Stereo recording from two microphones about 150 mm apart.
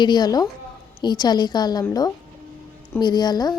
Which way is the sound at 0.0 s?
30° left (ahead or behind).